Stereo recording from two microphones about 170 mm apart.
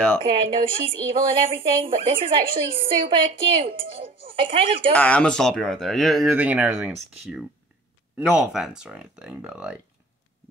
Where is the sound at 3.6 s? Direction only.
30° right (ahead or behind).